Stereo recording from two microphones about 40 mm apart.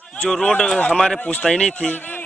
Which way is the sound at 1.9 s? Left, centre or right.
Left.